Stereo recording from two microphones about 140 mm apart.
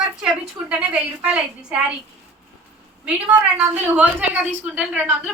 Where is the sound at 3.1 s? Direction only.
10° right (ahead or behind).